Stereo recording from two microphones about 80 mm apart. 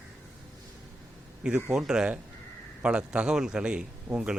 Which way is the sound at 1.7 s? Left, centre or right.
Centre.